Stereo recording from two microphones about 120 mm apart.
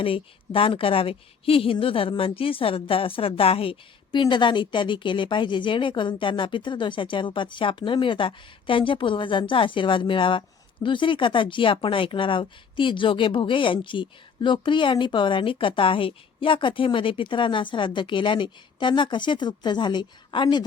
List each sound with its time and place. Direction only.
0.0 s a woman's voice: 50° left (ahead or behind)